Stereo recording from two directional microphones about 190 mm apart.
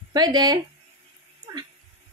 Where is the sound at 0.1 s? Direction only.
20° right (ahead or behind).